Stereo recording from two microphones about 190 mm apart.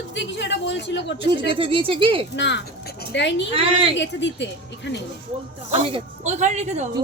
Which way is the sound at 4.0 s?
70° left (ahead or behind).